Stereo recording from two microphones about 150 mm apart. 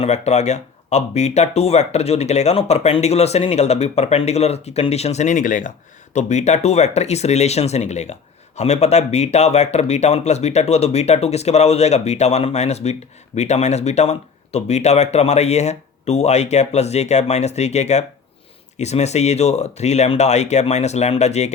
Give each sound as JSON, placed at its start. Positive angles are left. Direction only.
{"t": 0.0, "sound": "speech", "side_deg": 45}
{"t": 6.1, "sound": "speech", "side_deg": 50}